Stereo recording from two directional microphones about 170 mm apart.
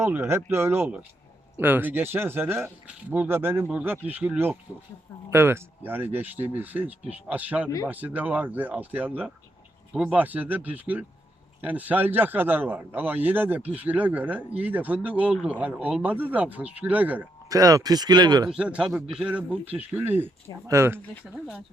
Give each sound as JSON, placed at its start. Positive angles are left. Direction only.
{"t": 0.0, "sound": "speech", "side_deg": -15}
{"t": 17.5, "sound": "speech", "side_deg": -20}
{"t": 18.4, "sound": "speech", "side_deg": -5}